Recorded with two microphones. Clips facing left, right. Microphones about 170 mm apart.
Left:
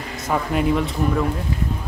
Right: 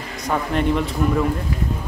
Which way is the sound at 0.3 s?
5° left (ahead or behind).